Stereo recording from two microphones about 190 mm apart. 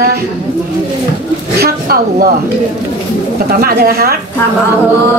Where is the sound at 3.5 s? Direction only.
50° right (ahead or behind).